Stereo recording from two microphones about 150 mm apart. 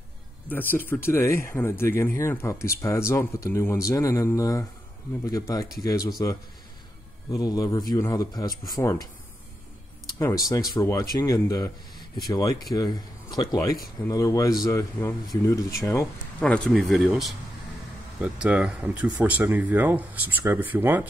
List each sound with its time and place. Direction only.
0.5 s speech: 10° left (ahead or behind)
7.3 s speech: 25° left (ahead or behind)
10.1 s speech: 25° left (ahead or behind)
16.3 s speech: 10° left (ahead or behind); by 21.1 s 10° right (ahead or behind)